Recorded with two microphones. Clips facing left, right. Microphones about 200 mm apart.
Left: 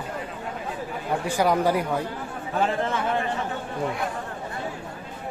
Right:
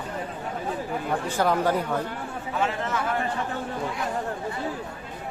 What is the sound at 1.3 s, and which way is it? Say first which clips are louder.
Speech: left 2 dB; 10° left (ahead or behind).